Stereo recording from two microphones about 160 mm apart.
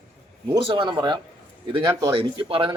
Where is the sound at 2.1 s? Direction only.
35° right (ahead or behind).